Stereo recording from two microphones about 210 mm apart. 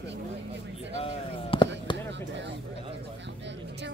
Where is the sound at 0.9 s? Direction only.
25° left (ahead or behind).